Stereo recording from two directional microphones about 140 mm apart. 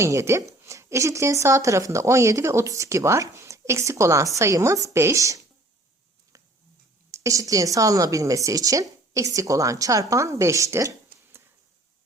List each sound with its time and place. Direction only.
0.0 s speech: 20° right (ahead or behind)
7.1 s speech: 20° right (ahead or behind)